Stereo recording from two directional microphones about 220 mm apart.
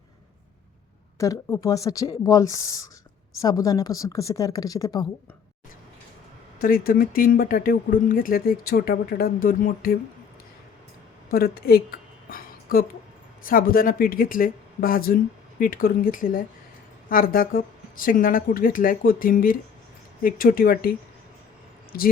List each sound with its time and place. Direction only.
1.2 s speech: 15° left (ahead or behind)
6.6 s speech: 40° left (ahead or behind)
11.3 s a sound: 45° left (ahead or behind)
13.4 s speech: 40° left (ahead or behind)